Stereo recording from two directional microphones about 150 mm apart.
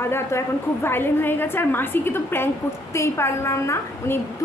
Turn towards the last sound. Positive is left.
turn(degrees=20)  # may be behind; listen again after turning